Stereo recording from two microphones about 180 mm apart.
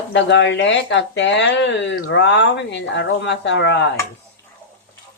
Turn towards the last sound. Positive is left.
turn(degrees=75)  # may be behind; listen again after turning